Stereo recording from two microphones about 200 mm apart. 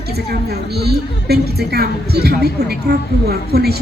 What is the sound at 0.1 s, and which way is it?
A woman's voice, 50° right (ahead or behind).